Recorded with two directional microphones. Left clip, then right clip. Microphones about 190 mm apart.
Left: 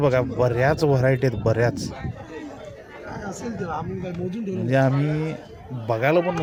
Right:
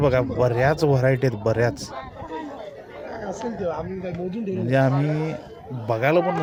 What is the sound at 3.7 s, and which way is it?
Speech, 45° left (ahead or behind).